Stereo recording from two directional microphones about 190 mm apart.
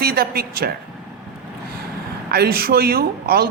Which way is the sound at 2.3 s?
55° right (ahead or behind).